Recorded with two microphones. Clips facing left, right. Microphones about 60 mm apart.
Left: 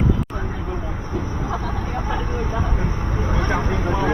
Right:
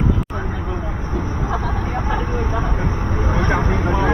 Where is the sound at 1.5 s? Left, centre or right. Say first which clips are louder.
Right 3 dB; right.